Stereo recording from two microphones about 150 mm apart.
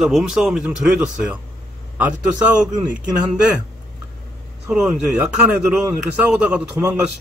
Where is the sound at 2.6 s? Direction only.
5° right (ahead or behind).